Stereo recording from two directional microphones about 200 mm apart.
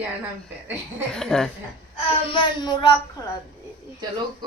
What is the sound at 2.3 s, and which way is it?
Child singing, 25° left (ahead or behind).